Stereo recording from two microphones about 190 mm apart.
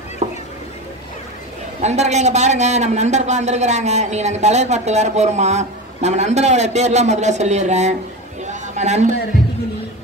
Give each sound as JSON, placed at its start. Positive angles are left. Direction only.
{"t": 0.2, "sound": "a sound", "side_deg": -35}
{"t": 1.8, "sound": "a man's voice", "side_deg": -35}
{"t": 8.5, "sound": "chatter", "side_deg": -35}